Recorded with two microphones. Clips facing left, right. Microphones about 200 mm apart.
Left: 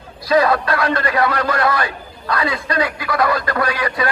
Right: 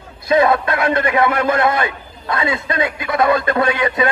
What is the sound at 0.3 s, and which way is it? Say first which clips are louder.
A man's voice: right 1 dB; 25° right (ahead or behind).